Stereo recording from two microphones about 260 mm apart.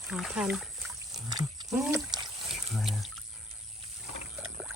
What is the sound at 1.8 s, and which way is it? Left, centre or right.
Speech, centre.